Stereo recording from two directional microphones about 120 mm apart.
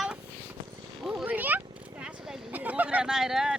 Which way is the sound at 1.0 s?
10° right (ahead or behind).